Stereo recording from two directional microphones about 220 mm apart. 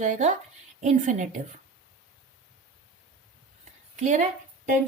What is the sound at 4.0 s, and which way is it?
Speech, 35° right (ahead or behind).